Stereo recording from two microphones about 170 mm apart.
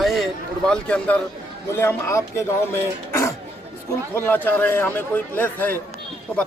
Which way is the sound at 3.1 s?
15° left (ahead or behind).